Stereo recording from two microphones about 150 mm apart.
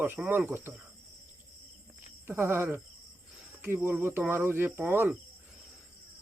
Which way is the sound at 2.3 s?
15° right (ahead or behind).